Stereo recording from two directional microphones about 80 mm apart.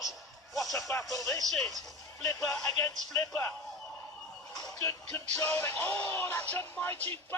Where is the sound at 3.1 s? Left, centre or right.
Left.